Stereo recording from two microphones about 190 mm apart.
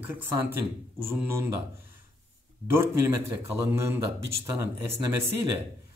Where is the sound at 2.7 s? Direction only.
10° right (ahead or behind).